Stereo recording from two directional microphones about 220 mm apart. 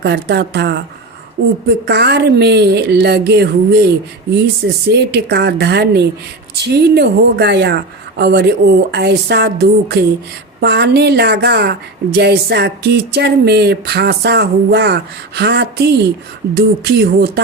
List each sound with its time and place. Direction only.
0.0 s a woman's voice: 50° right (ahead or behind)